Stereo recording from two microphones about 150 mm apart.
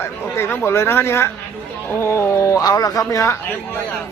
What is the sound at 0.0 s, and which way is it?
Speech, 15° left (ahead or behind).